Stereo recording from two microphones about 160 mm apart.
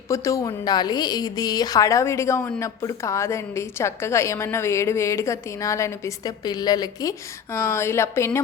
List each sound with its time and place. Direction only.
0.1 s a woman's voice: 20° left (ahead or behind)